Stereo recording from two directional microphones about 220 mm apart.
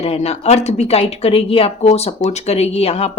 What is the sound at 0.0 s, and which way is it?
Speech, 30° left (ahead or behind).